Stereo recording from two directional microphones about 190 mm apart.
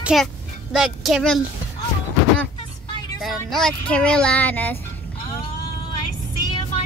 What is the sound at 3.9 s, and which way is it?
Speech, 5° left (ahead or behind).